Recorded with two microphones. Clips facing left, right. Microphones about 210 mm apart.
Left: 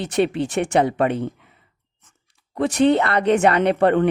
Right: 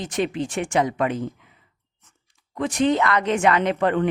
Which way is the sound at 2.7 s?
65° left (ahead or behind).